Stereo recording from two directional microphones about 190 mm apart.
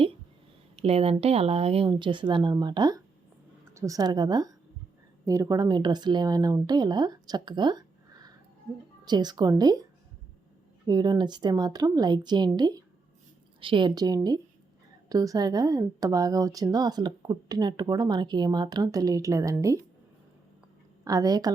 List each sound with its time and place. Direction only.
0.8 s speech: 30° right (ahead or behind)
10.8 s speech: 20° right (ahead or behind)
21.0 s speech: 20° right (ahead or behind)